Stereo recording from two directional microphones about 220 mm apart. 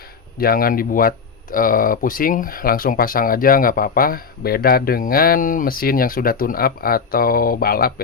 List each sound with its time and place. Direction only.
0.3 s speech: 45° left (ahead or behind)